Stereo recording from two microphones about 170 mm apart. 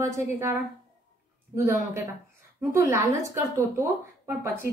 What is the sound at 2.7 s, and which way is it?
Speech, 15° right (ahead or behind).